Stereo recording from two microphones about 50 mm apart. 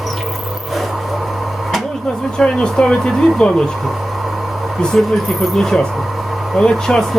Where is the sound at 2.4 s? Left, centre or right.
Centre.